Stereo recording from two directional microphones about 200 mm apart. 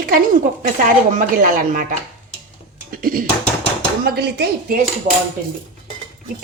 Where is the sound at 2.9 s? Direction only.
45° right (ahead or behind).